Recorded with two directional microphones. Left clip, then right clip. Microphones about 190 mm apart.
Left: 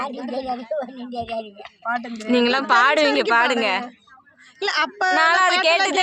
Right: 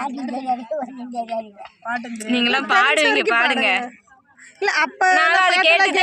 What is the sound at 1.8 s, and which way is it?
Speech, 20° right (ahead or behind).